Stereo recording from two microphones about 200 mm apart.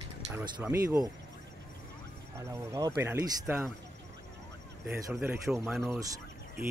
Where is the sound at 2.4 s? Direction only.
15° right (ahead or behind).